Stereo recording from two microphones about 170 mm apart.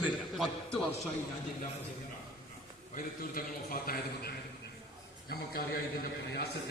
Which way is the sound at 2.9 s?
55° left (ahead or behind).